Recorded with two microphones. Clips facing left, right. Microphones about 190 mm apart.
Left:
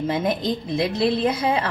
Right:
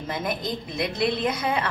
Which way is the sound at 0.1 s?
25° left (ahead or behind).